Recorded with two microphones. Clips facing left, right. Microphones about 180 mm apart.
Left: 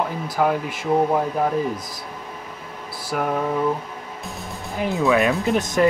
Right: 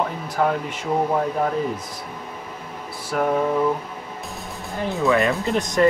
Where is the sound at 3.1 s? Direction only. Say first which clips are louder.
Right 2 dB; 5° left (ahead or behind).